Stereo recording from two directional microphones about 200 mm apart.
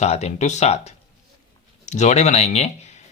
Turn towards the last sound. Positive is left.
turn(degrees=35)  # may be behind; listen again after turning